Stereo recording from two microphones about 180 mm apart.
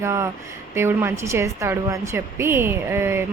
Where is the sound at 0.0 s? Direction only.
15° right (ahead or behind).